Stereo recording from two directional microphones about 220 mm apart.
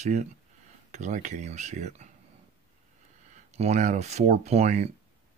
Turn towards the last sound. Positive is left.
turn(degrees=-30)  # may be behind; listen again after turning